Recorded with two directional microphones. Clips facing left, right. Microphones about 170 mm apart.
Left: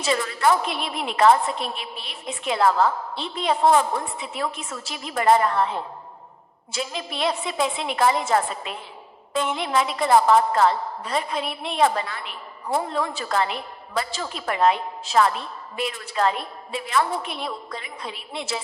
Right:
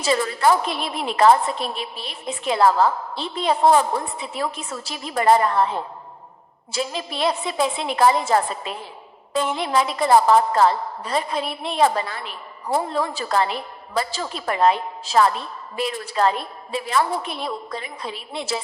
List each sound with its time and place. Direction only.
0.0 s a woman's voice: 35° right (ahead or behind)
6.7 s a woman's voice: 35° right (ahead or behind)